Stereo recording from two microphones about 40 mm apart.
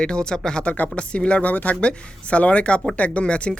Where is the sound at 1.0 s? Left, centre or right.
Left.